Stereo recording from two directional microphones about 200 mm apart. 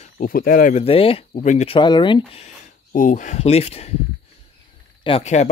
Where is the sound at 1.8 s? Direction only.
20° left (ahead or behind).